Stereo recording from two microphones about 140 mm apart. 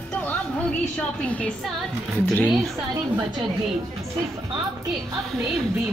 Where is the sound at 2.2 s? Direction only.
10° left (ahead or behind).